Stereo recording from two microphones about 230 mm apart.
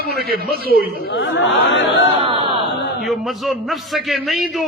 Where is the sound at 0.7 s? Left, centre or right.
Left.